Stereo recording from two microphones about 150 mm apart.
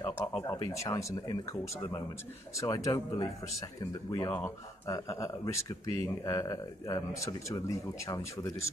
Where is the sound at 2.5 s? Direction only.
25° left (ahead or behind).